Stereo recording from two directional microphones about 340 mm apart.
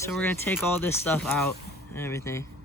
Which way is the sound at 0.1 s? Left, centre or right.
Centre.